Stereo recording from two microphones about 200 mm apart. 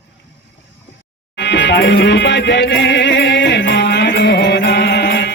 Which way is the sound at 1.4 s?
60° left (ahead or behind).